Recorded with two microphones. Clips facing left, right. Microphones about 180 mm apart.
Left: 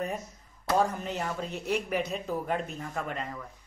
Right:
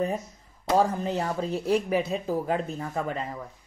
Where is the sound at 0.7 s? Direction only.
35° right (ahead or behind).